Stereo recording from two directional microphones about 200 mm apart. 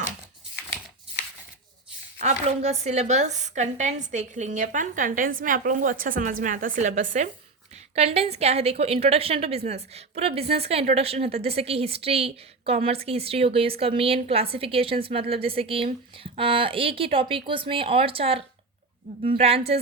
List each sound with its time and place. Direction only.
2.2 s a woman's voice: 35° right (ahead or behind)